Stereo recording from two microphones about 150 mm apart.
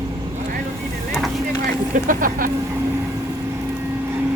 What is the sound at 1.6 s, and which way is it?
Speech, 65° right (ahead or behind).